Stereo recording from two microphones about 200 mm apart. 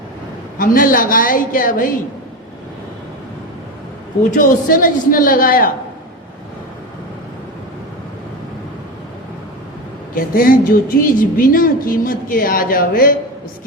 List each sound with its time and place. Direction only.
0.6 s a woman's voice: 45° left (ahead or behind)
4.4 s a woman's voice: 40° left (ahead or behind)
10.2 s a woman's voice: 45° left (ahead or behind)